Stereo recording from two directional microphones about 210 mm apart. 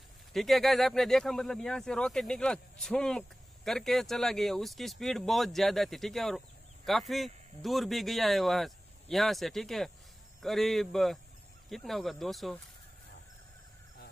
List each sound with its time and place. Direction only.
0.3 s speech: centre (ahead or behind)